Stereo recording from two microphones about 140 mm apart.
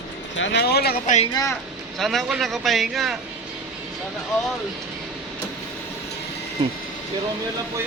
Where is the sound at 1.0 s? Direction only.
55° left (ahead or behind).